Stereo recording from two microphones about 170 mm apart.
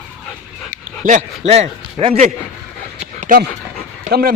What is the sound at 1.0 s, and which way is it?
Speech, 50° right (ahead or behind).